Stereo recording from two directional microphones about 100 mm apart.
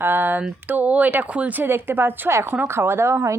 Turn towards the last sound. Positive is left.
turn(degrees=-25)  # may be behind; listen again after turning